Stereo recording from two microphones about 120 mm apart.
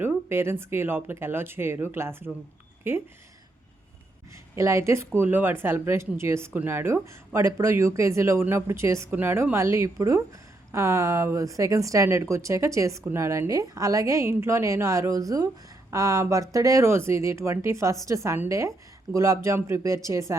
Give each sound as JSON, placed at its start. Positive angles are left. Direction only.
{"t": 0.0, "sound": "speech", "side_deg": -20}
{"t": 4.5, "sound": "speech", "side_deg": -25}